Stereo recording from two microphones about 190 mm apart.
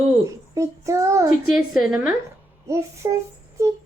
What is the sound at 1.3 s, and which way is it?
Speech, centre (ahead or behind).